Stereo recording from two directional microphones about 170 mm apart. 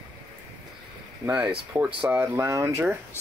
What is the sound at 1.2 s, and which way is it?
Speech, 10° right (ahead or behind).